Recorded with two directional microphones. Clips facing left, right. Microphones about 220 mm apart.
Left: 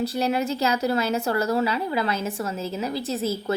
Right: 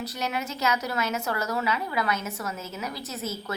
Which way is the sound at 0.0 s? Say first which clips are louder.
Left 8 dB; 30° left (ahead or behind).